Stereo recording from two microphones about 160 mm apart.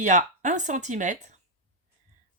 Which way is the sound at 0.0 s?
50° right (ahead or behind).